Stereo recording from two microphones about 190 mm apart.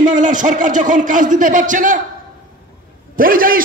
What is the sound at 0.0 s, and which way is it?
Speech, 40° right (ahead or behind).